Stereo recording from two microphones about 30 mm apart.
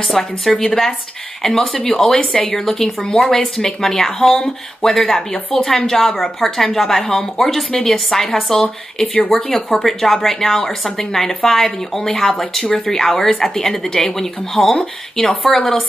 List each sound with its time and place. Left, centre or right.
0.1 s speech: centre
5.9 s speech: centre